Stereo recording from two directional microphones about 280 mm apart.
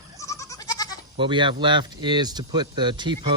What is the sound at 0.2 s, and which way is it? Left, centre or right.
Goat, centre.